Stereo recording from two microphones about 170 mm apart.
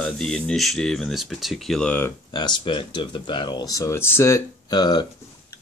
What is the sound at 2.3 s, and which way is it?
Speech, 25° left (ahead or behind).